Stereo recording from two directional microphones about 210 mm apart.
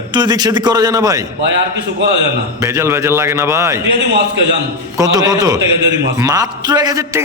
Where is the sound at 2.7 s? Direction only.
15° right (ahead or behind).